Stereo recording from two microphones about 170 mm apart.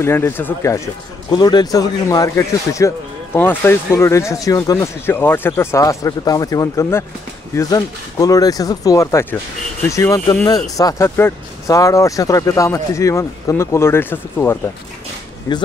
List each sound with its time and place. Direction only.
0.0 s speech: 15° left (ahead or behind)